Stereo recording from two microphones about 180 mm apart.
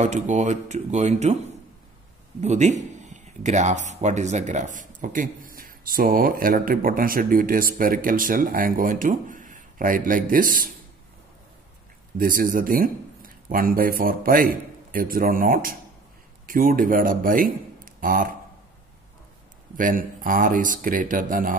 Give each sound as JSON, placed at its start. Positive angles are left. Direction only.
{"t": 0.0, "sound": "speech", "side_deg": -40}
{"t": 2.4, "sound": "speech", "side_deg": -40}
{"t": 12.2, "sound": "a man's voice", "side_deg": -50}
{"t": 19.8, "sound": "speech", "side_deg": -50}